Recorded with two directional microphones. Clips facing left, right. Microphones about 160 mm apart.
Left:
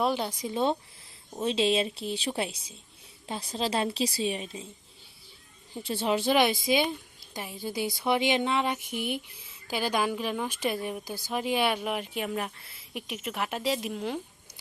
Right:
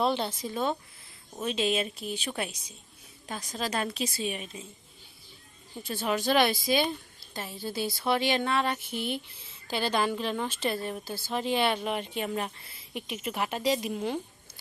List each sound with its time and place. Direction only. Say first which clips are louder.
0.0 s speech: even; 10° left (ahead or behind)
0.4 s a woman's voice: left 6 dB; 25° left (ahead or behind)
5.8 s a woman's voice: left 2 dB; 30° left (ahead or behind); by 14.2 s centre (ahead or behind)